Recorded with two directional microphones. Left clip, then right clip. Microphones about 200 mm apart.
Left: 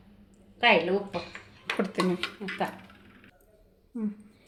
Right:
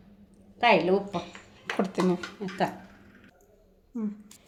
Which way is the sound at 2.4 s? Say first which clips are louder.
Left 1 dB; 45° right (ahead or behind).